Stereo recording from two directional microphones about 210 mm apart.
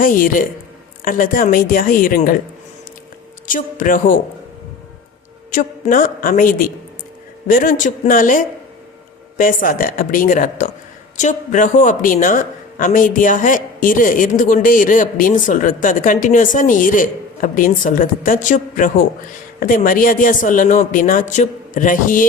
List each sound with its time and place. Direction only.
0.0 s a woman's voice: 40° left (ahead or behind)
3.4 s a woman's voice: 40° left (ahead or behind)
5.5 s a woman's voice: 40° left (ahead or behind)